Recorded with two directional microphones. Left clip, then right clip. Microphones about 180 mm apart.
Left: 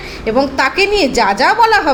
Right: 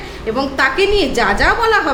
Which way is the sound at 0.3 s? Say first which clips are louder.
Left 2 dB; 25° left (ahead or behind).